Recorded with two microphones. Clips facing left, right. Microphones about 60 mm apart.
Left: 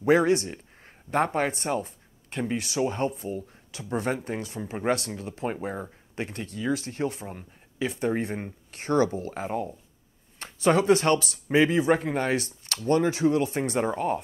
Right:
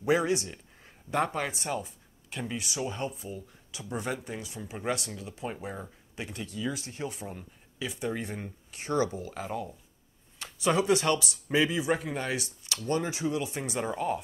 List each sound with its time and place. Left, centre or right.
0.0 s speech: left